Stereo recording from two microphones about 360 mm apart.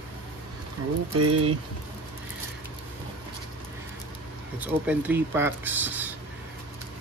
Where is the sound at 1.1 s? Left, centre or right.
Right.